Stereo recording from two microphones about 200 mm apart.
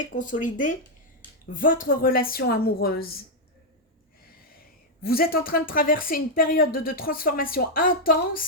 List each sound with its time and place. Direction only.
0.0 s speech: 40° left (ahead or behind)
5.0 s speech: 50° left (ahead or behind)